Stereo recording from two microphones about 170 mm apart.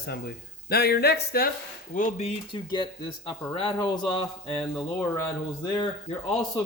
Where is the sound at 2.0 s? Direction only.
40° left (ahead or behind).